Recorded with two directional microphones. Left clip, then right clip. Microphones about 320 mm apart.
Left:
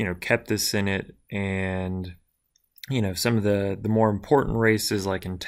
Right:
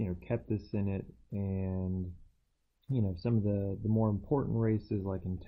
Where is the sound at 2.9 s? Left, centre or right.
Centre.